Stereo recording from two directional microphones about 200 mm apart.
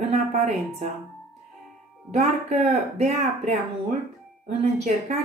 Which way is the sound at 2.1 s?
35° right (ahead or behind).